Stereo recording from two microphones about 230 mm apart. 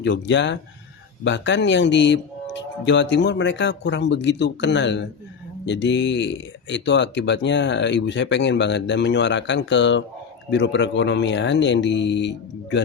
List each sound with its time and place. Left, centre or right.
0.0 s speech: left